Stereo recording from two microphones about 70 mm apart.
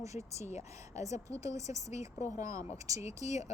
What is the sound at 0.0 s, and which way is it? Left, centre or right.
A woman's voice, right.